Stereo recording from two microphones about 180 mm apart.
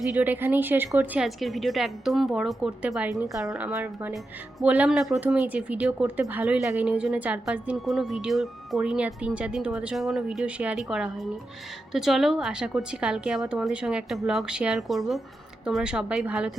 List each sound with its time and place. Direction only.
0.1 s a woman's voice: 10° right (ahead or behind)